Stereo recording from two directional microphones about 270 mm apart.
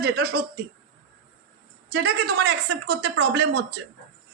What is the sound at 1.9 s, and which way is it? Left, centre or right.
A woman's voice, right.